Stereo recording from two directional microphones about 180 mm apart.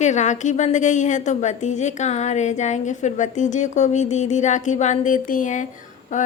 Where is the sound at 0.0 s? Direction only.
40° left (ahead or behind).